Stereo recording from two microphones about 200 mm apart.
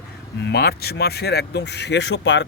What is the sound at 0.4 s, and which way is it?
Speech, 55° left (ahead or behind).